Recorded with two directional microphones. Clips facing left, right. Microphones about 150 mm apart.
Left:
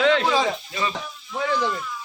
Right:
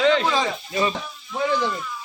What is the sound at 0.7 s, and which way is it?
Speech, 25° right (ahead or behind).